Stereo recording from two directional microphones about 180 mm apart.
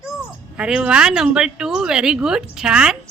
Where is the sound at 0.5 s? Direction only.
5° right (ahead or behind).